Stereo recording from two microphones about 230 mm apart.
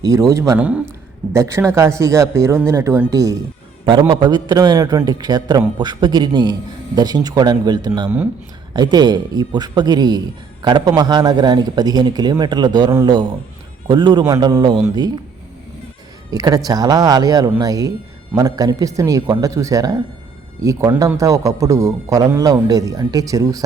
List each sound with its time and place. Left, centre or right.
0.0 s a man's voice: centre
16.3 s a man's voice: centre